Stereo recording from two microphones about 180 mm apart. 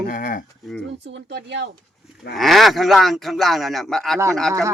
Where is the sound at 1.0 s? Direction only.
80° right.